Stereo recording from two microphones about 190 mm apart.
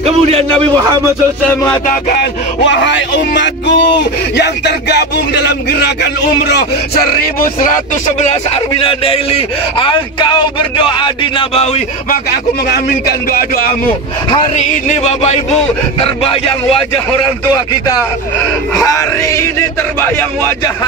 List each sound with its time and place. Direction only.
0.0 s a man's voice: 30° right (ahead or behind)
1.5 s a sound: 15° left (ahead or behind)
1.9 s speech: 45° left (ahead or behind)
2.6 s speech: 70° left (ahead or behind); by 11.8 s 30° left (ahead or behind)
12.1 s speech: 55° left (ahead or behind)
14.3 s speech: 25° left (ahead or behind)
14.7 s a sound: 35° left (ahead or behind)
17.5 s speech: 20° left (ahead or behind)
18.8 s a sound: 15° left (ahead or behind)